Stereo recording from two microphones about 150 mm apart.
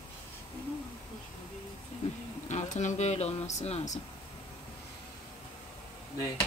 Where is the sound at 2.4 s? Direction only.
55° left (ahead or behind).